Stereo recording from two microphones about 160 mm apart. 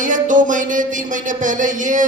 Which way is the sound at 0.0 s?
55° right (ahead or behind).